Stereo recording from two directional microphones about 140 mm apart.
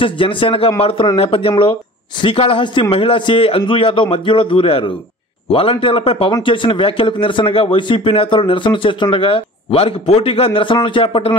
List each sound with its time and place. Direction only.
0.0 s a man's voice: 35° left (ahead or behind)